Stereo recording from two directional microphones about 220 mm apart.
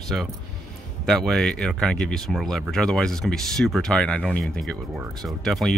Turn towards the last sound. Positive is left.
turn(degrees=0)  # may be behind; listen again after turning